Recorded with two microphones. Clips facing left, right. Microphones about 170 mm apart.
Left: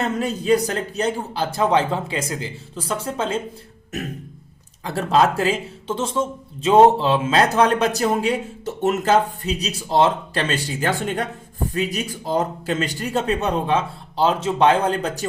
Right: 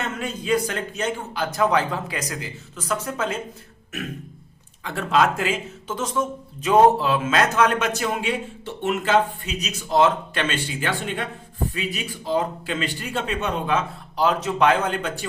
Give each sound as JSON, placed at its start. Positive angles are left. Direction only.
{"t": 0.0, "sound": "speech", "side_deg": 35}
{"t": 4.8, "sound": "speech", "side_deg": 35}